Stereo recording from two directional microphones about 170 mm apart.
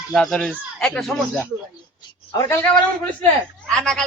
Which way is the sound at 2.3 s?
15° left (ahead or behind).